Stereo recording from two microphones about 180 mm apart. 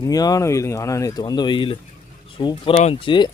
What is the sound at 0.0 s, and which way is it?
Speech, 20° left (ahead or behind).